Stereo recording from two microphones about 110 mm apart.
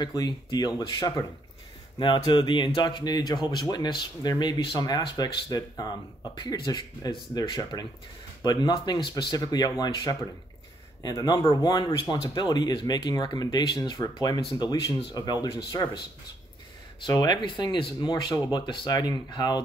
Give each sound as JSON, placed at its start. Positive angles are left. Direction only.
{"t": 0.0, "sound": "speech", "side_deg": 40}
{"t": 17.1, "sound": "speech", "side_deg": 40}